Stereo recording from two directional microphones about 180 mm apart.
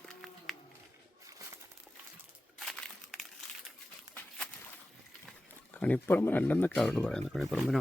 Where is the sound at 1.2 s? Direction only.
20° right (ahead or behind).